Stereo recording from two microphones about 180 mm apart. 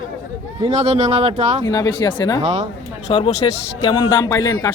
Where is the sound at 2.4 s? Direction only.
35° right (ahead or behind).